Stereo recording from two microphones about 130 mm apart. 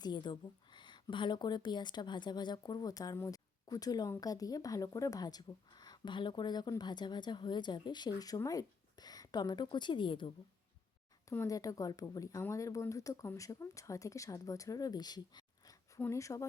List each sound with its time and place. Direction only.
0.0 s a woman's voice: 35° left (ahead or behind)
11.3 s speech: 25° left (ahead or behind)
16.0 s speech: 20° left (ahead or behind)